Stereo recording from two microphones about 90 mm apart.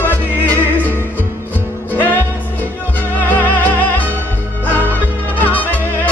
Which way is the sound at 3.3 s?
20° left (ahead or behind).